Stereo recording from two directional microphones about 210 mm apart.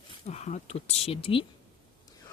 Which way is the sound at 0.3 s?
30° left (ahead or behind).